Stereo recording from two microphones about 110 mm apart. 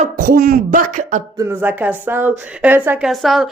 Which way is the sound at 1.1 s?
90° right.